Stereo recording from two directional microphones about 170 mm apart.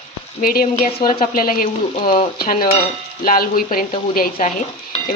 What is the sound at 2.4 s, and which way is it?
Speech, 55° left (ahead or behind).